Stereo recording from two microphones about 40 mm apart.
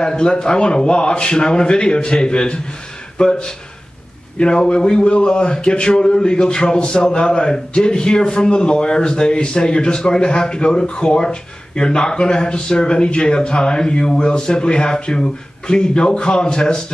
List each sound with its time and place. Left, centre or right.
0.0 s speech: left